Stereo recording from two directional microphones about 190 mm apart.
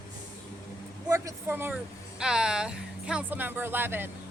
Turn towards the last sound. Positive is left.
turn(degrees=-10)  # may be behind; listen again after turning